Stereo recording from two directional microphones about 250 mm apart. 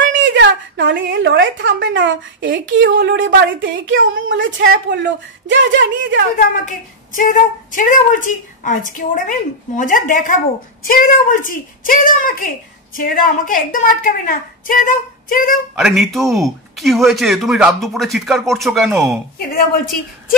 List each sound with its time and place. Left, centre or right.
0.1 s a woman's voice: right
7.2 s speech: left
15.7 s a man's voice: centre